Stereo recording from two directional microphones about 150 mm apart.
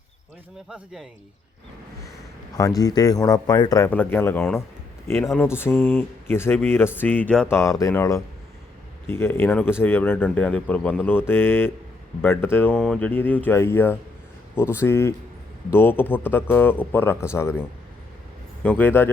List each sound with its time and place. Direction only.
2.6 s speech: 25° left (ahead or behind)
3.8 s speech: 10° left (ahead or behind)